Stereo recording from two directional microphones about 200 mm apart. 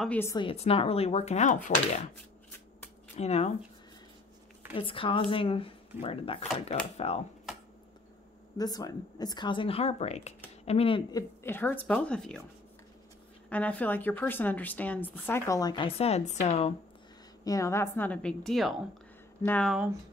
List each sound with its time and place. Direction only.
0.0 s a woman's voice: 10° left (ahead or behind)
0.4 s speech: 30° left (ahead or behind)
3.2 s speech: 35° left (ahead or behind)
4.7 s speech: 25° left (ahead or behind)
7.5 s a sound: centre (ahead or behind)
8.5 s speech: 20° left (ahead or behind)
13.5 s a woman's voice: 5° left (ahead or behind); by 16.7 s 30° left (ahead or behind)
17.5 s a woman's voice: 15° left (ahead or behind)